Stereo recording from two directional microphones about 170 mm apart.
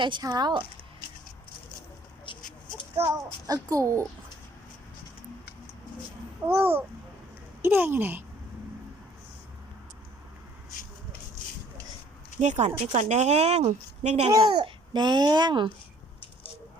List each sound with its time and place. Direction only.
0.0 s a child's voice: 25° right (ahead or behind)
3.1 s a child's voice: 20° right (ahead or behind)
6.5 s speech: 15° right (ahead or behind)
12.4 s speech: 40° right (ahead or behind)
14.3 s a child's voice: 25° right (ahead or behind)